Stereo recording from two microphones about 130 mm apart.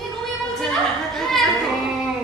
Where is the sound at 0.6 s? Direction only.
5° left (ahead or behind).